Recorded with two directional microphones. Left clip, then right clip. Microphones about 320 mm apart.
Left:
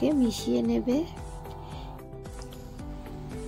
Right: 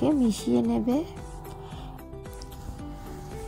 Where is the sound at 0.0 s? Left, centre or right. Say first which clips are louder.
Right 1 dB; right.